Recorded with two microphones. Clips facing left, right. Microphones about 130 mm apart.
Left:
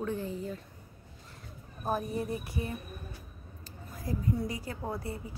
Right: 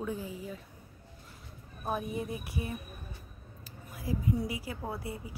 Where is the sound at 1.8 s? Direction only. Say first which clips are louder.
Left 2 dB; centre (ahead or behind).